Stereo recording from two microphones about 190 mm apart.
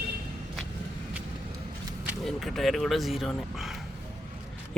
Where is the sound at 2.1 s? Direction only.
Centre (ahead or behind).